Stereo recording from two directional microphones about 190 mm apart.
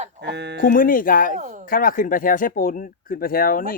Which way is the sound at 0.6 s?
45° left (ahead or behind).